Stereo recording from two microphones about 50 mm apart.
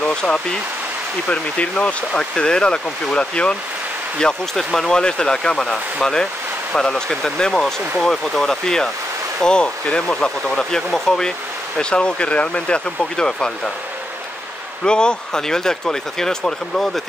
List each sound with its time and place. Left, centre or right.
0.0 s stream: centre
1.3 s speech: left
14.9 s speech: centre